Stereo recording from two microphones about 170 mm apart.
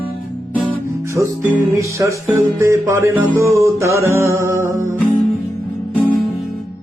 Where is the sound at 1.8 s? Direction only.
15° right (ahead or behind).